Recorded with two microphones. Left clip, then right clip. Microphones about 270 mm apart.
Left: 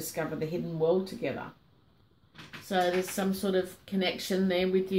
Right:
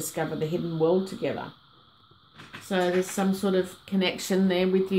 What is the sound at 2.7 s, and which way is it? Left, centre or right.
Speech, right.